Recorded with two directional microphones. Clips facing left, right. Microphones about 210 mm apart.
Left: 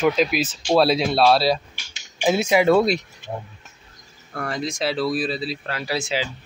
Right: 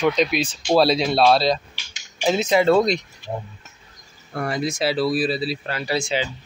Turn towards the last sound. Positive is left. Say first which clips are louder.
# right 2 dB
turn(degrees=5)  # may be behind; listen again after turning